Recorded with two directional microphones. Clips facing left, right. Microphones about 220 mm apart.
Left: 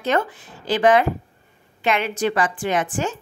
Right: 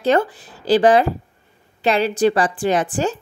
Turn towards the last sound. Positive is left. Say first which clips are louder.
# right 4 dB
turn(degrees=-35)  # may be behind; listen again after turning